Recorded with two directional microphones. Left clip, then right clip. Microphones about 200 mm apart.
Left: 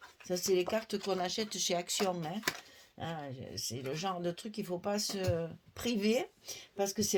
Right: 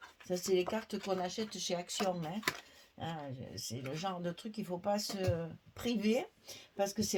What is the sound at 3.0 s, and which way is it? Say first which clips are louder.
Speech: left 2 dB; 45° left (ahead or behind).